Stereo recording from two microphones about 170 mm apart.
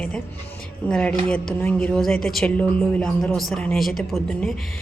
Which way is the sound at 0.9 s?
5° left (ahead or behind).